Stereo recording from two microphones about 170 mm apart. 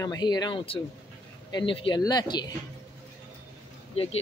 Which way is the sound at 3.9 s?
35° left (ahead or behind).